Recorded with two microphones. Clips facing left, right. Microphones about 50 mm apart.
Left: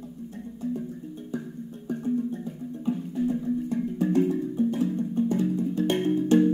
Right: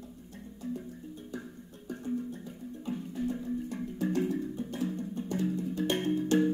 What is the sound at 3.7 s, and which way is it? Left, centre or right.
Music, left.